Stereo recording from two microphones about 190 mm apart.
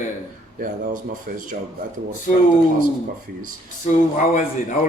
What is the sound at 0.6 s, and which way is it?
Speech, 45° right (ahead or behind).